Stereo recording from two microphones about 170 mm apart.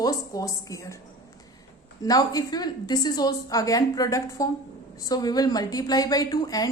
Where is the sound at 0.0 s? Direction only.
20° left (ahead or behind).